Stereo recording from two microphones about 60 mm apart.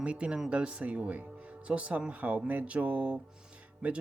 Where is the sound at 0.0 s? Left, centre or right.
Centre.